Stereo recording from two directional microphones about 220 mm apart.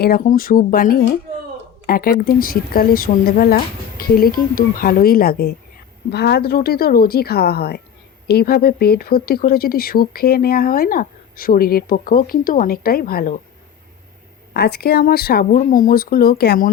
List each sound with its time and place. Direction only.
0.0 s speech: 40° left (ahead or behind)
14.5 s speech: 45° left (ahead or behind)